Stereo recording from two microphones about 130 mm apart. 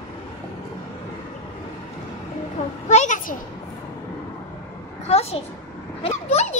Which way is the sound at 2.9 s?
70° left (ahead or behind).